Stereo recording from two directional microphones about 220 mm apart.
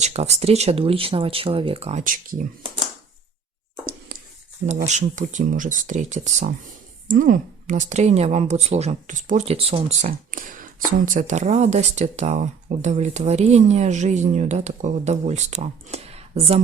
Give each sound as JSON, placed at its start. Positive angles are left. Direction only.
{"t": 0.0, "sound": "speech", "side_deg": -30}
{"t": 4.1, "sound": "a sound", "side_deg": -45}
{"t": 4.9, "sound": "a woman's voice", "side_deg": -35}